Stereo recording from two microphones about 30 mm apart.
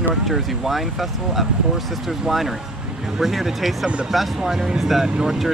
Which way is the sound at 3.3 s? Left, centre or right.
Centre.